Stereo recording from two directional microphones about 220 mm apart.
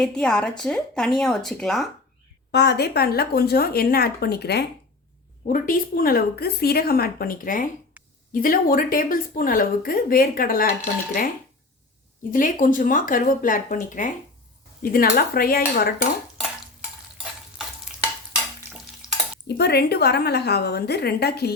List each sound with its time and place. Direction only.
0.0 s speech: 5° left (ahead or behind)
2.5 s speech: 50° left (ahead or behind)
8.0 s a sound: 5° right (ahead or behind)
8.3 s speech: 40° left (ahead or behind)
12.3 s speech: 40° left (ahead or behind)
17.2 s stir: 5° right (ahead or behind)
19.5 s speech: 50° left (ahead or behind)